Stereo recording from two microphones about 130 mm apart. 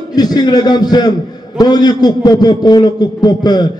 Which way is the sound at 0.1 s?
30° left (ahead or behind).